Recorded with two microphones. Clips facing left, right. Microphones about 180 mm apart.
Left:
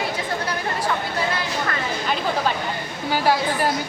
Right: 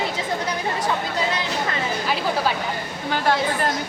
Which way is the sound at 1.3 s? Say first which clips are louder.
Even; 20° right (ahead or behind).